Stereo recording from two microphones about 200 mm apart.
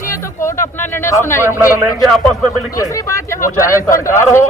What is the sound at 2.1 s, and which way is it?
Speech, centre (ahead or behind).